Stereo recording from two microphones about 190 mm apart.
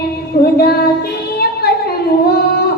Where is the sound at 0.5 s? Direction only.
55° left (ahead or behind).